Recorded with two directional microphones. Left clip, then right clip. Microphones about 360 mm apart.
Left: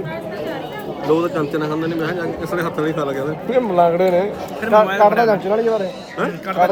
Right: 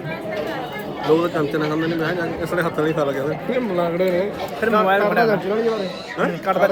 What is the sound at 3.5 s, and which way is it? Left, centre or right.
Speech, centre.